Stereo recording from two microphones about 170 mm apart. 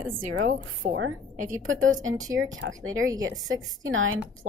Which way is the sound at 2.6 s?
90° right.